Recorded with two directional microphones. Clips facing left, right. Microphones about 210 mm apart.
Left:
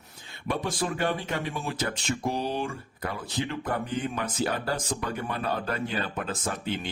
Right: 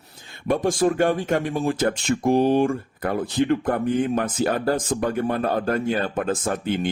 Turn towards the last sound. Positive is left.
turn(degrees=-50)  # may be behind; listen again after turning